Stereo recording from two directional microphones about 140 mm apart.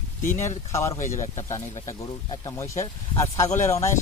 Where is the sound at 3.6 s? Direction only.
20° left (ahead or behind).